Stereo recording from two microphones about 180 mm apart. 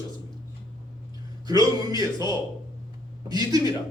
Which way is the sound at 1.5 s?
20° right (ahead or behind).